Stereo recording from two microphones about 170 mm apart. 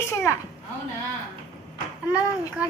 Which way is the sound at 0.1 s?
10° left (ahead or behind).